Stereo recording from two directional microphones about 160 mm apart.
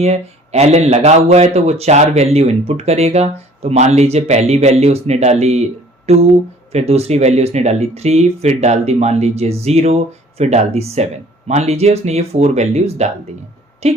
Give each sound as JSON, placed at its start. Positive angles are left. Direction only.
{"t": 0.0, "sound": "speech", "side_deg": -40}